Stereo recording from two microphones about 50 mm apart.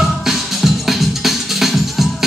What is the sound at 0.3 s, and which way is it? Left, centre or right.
Music, centre.